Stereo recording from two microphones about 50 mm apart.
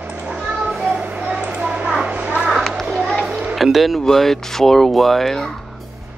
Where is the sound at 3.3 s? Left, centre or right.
Centre.